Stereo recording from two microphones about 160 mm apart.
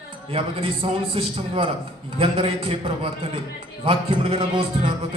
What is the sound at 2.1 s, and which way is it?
A man's voice, 35° right (ahead or behind).